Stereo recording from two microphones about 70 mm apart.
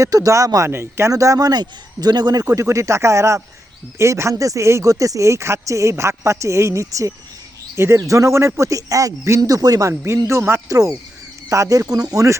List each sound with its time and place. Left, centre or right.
0.0 s speech: right
0.7 s speech: right
1.1 s a man's voice: right
2.5 s speech: right
9.4 s a man's voice: right
10.1 s speech: right
10.7 s speech: right